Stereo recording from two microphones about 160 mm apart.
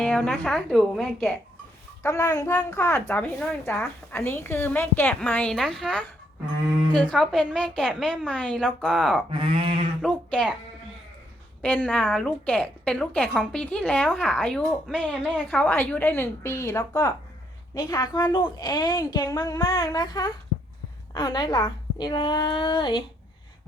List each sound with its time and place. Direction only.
0.0 s a woman's voice: 5° left (ahead or behind)
2.0 s a woman's voice: 20° left (ahead or behind); by 9.2 s centre (ahead or behind)
9.3 s speech: 35° right (ahead or behind)
10.0 s a woman's voice: 5° left (ahead or behind)
11.6 s a woman's voice: 10° left (ahead or behind)
12.0 s a woman's voice: centre (ahead or behind); by 23.0 s 30° left (ahead or behind)